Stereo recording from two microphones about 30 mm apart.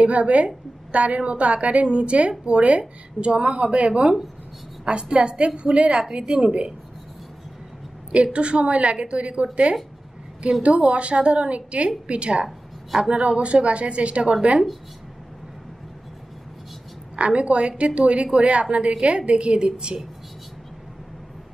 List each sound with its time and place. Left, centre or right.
0.0 s a woman's voice: right
8.1 s a woman's voice: right
17.1 s a woman's voice: right